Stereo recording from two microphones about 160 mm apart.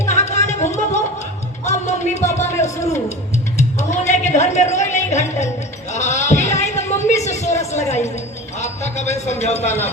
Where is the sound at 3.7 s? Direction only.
45° left (ahead or behind).